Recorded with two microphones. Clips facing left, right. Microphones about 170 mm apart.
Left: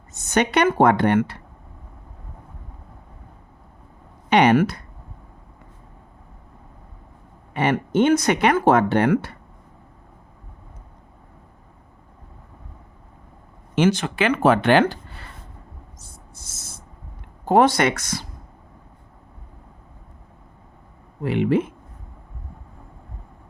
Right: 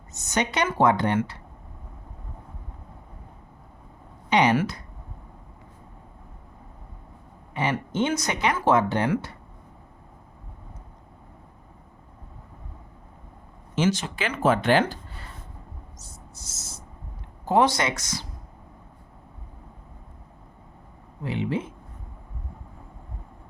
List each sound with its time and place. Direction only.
0.1 s speech: 55° left (ahead or behind)
4.3 s speech: 60° left (ahead or behind)
7.5 s speech: 60° left (ahead or behind)
13.7 s speech: 60° left (ahead or behind)
16.0 s a sound: 55° left (ahead or behind)
17.4 s speech: 55° left (ahead or behind)
21.2 s speech: 65° left (ahead or behind)